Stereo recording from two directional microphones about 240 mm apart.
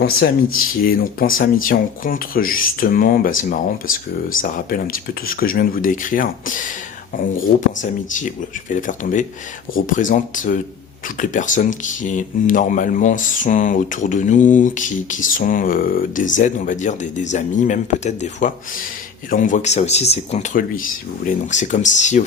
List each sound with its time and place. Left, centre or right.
0.0 s speech: left